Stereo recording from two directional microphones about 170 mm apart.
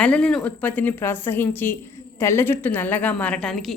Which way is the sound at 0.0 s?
5° left (ahead or behind).